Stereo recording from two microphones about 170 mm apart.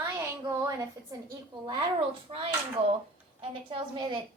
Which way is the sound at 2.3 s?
35° right (ahead or behind).